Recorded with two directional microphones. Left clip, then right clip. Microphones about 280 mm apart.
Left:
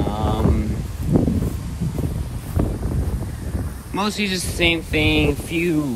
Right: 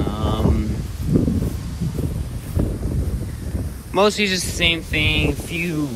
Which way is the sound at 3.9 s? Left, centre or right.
Centre.